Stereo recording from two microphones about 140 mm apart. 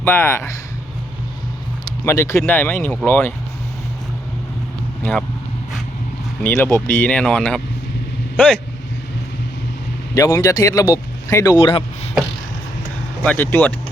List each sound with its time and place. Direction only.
0.0 s speech: 15° left (ahead or behind)
2.0 s speech: 20° left (ahead or behind)
6.4 s speech: 15° left (ahead or behind)
10.2 s speech: 25° left (ahead or behind)
13.2 s speech: 15° left (ahead or behind)